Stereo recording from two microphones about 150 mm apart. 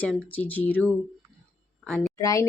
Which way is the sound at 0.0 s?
10° left (ahead or behind).